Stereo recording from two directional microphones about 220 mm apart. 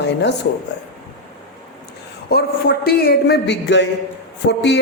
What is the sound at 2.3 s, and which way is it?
A man's voice, 45° left (ahead or behind).